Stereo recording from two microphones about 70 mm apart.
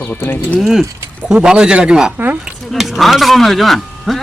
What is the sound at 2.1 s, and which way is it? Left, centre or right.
Speech, right.